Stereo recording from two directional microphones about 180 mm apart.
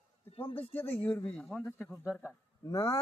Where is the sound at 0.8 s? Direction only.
10° left (ahead or behind).